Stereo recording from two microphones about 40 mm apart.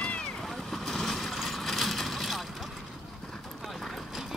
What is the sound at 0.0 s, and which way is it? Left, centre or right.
Vehicle, left.